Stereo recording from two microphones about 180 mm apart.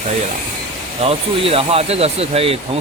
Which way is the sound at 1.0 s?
30° right (ahead or behind).